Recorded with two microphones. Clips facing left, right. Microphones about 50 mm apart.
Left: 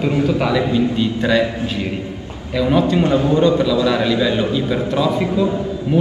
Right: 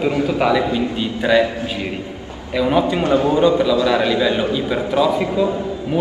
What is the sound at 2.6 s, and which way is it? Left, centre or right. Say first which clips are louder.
Speech: left 1 dB; centre.